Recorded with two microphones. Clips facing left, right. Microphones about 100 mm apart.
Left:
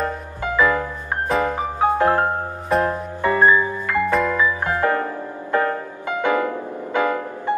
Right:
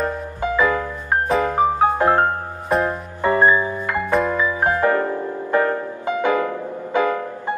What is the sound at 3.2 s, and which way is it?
Music, 20° right (ahead or behind).